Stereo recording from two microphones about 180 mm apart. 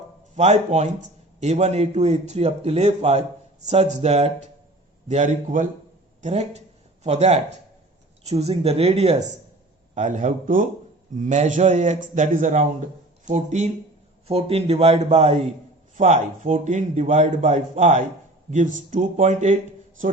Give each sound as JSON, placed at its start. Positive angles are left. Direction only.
{"t": 0.3, "sound": "a man's voice", "side_deg": -40}